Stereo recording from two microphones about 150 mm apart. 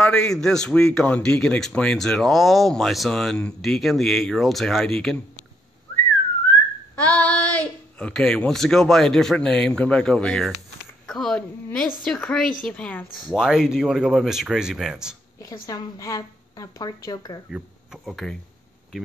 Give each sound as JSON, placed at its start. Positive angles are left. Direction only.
{"t": 0.0, "sound": "a man's voice", "side_deg": 5}
{"t": 7.0, "sound": "a man's voice", "side_deg": 10}
{"t": 13.3, "sound": "a man's voice", "side_deg": -5}
{"t": 15.6, "sound": "speech", "side_deg": 20}
{"t": 17.5, "sound": "speech", "side_deg": -5}